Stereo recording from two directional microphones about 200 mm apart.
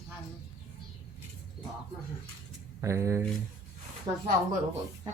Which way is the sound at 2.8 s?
15° right (ahead or behind).